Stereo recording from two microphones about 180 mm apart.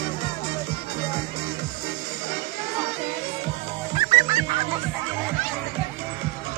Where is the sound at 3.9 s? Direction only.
20° right (ahead or behind).